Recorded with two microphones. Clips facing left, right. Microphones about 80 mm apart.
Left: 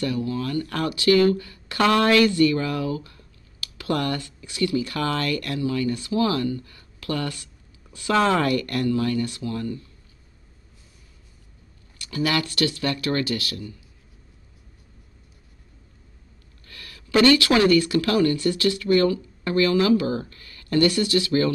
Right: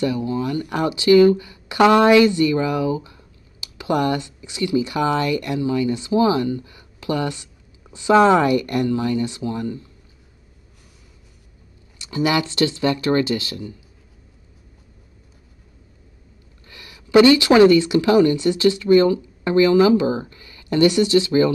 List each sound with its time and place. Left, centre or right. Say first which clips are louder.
0.0 s speech: right 4 dB; centre
12.0 s speech: right 4 dB; centre
16.6 s speech: right 2 dB; centre